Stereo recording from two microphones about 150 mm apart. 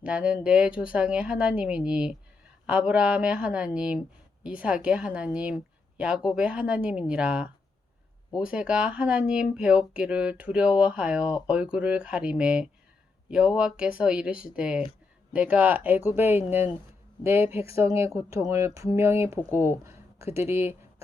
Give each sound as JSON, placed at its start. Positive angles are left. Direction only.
{"t": 0.0, "sound": "speech", "side_deg": -10}